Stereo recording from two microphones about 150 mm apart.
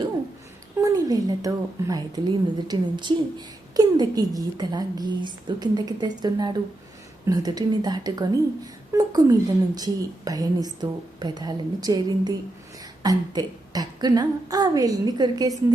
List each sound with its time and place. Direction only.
0.8 s a woman's voice: 20° right (ahead or behind)